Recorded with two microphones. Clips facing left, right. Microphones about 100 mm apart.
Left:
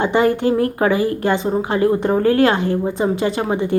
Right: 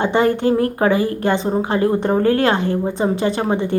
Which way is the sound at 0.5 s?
35° right (ahead or behind).